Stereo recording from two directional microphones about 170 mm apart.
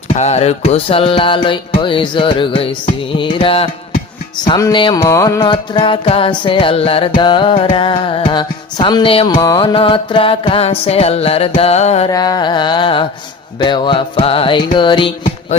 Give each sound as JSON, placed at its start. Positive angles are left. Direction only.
{"t": 0.1, "sound": "music", "side_deg": 40}
{"t": 12.1, "sound": "music", "side_deg": 25}